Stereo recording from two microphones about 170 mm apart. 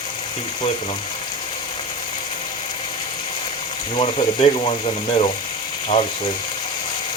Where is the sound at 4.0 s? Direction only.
35° left (ahead or behind).